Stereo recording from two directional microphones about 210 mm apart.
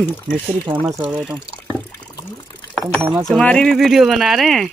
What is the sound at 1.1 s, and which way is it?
Speech, centre (ahead or behind).